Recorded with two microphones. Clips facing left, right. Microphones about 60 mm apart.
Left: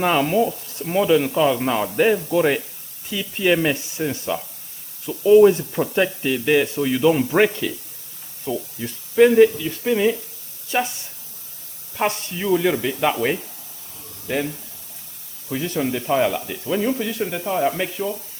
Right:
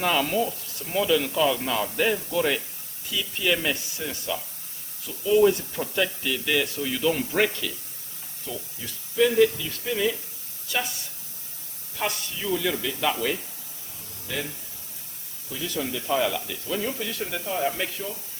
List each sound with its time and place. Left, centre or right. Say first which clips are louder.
0.0 s speech: left 6 dB; left
8.8 s speech: left 9 dB; left
9.1 s speech: left 7 dB; left
9.6 s speech: left 7 dB; left
15.5 s speech: left 7 dB; left
17.0 s speech: left 6 dB; centre